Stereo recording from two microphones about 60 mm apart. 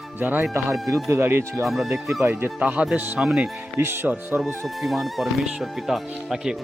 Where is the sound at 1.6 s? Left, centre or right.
Centre.